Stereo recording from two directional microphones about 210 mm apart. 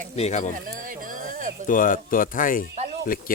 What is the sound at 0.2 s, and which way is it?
Speech, 35° left (ahead or behind).